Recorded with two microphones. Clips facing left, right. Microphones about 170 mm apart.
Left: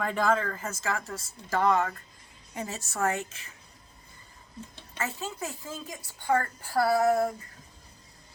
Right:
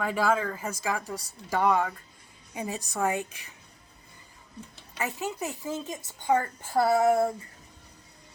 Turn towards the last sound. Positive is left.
turn(degrees=-25)  # may be behind; listen again after turning